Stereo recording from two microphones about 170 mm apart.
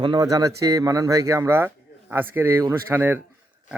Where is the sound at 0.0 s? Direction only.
25° right (ahead or behind).